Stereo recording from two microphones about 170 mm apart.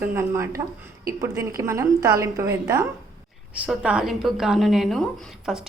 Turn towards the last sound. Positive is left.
turn(degrees=0)  # may be behind; listen again after turning